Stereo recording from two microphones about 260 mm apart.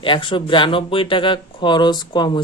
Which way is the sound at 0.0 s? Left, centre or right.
Centre.